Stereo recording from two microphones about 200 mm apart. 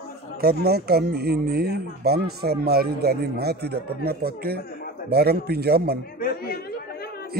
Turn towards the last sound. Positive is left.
turn(degrees=50)  # may be behind; listen again after turning